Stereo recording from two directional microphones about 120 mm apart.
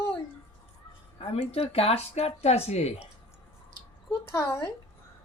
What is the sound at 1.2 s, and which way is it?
Speech, 55° left (ahead or behind).